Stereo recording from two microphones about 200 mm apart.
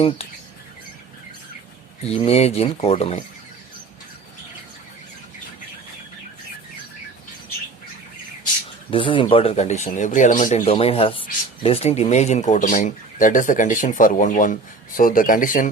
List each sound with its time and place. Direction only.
2.0 s speech: 30° left (ahead or behind)
8.9 s speech: 25° left (ahead or behind); by 10.7 s 40° left (ahead or behind)
10.7 s speech: 30° left (ahead or behind)